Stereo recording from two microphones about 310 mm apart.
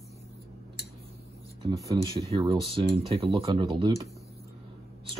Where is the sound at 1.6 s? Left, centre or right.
Centre.